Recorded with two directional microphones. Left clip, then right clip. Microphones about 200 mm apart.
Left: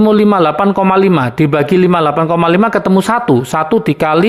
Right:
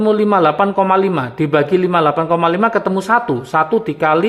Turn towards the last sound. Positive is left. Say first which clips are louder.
# left 3 dB
turn(degrees=30)  # may be behind; listen again after turning